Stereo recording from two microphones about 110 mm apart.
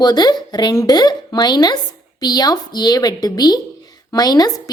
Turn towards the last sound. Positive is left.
turn(degrees=35)  # may be behind; listen again after turning